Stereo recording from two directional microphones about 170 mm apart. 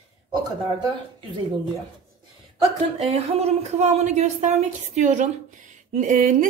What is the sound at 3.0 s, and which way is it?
A woman's voice, 40° right (ahead or behind).